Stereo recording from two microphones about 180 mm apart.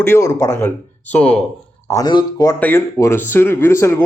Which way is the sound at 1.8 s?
20° left (ahead or behind).